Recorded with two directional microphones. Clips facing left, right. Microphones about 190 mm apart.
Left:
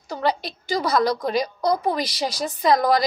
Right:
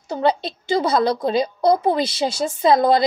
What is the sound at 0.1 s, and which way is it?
A woman's voice, 25° right (ahead or behind).